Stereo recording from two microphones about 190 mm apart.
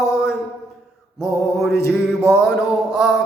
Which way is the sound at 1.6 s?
60° right (ahead or behind).